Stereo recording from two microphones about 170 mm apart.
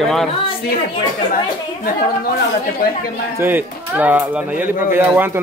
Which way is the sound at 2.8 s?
60° left (ahead or behind).